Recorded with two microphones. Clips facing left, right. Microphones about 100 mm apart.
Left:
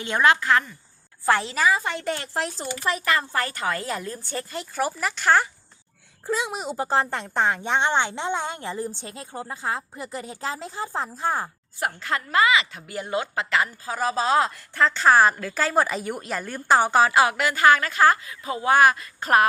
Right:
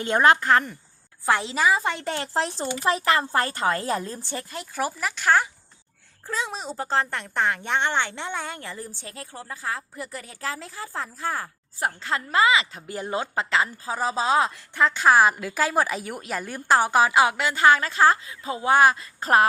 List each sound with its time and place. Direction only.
0.0 s a woman's voice: 40° right (ahead or behind)
1.2 s a woman's voice: 15° right (ahead or behind); by 4.2 s 30° right (ahead or behind)
4.5 s speech: 5° right (ahead or behind)
6.2 s speech: 15° left (ahead or behind)
11.8 s a woman's voice: 30° right (ahead or behind)
13.6 s a woman's voice: 20° right (ahead or behind)